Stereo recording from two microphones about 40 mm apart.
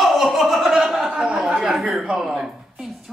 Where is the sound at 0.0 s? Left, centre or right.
Centre.